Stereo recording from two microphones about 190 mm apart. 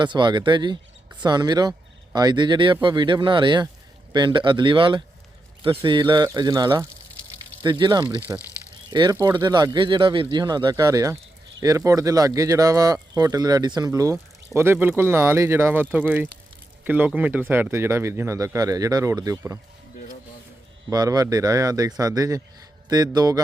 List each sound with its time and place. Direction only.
0.0 s speech: 25° right (ahead or behind)
20.9 s speech: 20° right (ahead or behind)